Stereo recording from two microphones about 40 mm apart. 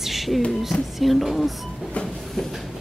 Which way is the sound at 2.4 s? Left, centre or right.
Centre.